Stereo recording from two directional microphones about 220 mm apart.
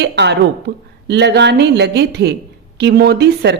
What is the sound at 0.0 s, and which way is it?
A woman's voice, 50° right (ahead or behind).